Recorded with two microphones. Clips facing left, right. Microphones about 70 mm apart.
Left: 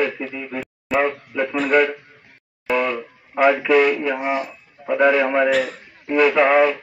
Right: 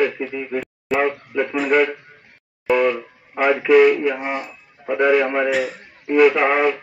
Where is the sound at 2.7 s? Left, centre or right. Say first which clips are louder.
Right 3 dB; centre.